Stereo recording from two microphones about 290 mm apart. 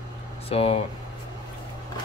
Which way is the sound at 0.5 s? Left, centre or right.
Centre.